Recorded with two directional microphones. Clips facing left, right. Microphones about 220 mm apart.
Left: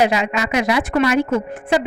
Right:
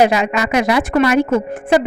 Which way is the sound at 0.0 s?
45° right (ahead or behind).